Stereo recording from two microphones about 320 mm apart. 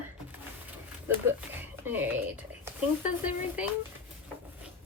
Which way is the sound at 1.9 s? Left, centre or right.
Centre.